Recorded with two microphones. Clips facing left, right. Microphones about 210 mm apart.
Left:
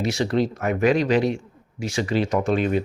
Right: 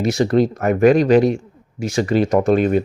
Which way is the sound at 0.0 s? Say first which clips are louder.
Right 6 dB; 45° right (ahead or behind).